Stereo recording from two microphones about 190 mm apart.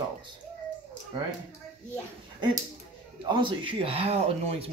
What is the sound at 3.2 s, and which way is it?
Speech, 25° right (ahead or behind).